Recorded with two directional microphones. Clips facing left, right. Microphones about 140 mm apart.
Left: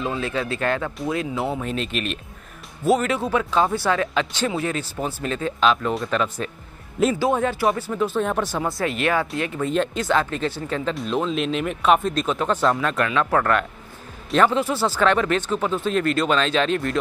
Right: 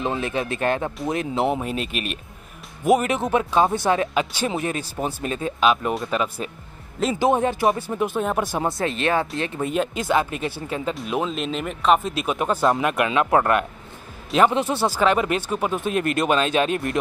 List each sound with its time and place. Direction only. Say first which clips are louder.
0.0 s speech: right 1 dB; 20° right (ahead or behind)
9.7 s speech: left 1 dB; 10° right (ahead or behind)